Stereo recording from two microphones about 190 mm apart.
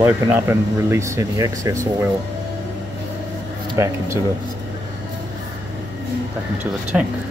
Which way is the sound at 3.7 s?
15° right (ahead or behind).